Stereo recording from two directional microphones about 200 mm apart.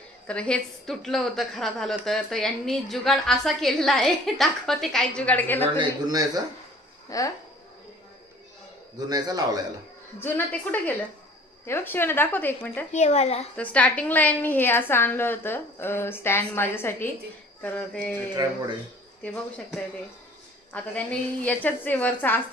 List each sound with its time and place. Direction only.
0.3 s a woman's voice: 5° left (ahead or behind)
5.8 s speech: 20° right (ahead or behind)
7.1 s speech: 15° left (ahead or behind)
9.1 s speech: 20° right (ahead or behind)
10.1 s a woman's voice: 10° left (ahead or behind)
12.9 s a woman's voice: 35° left (ahead or behind)
13.6 s a woman's voice: 5° left (ahead or behind)
18.3 s speech: 20° right (ahead or behind)
20.7 s a woman's voice: 5° left (ahead or behind)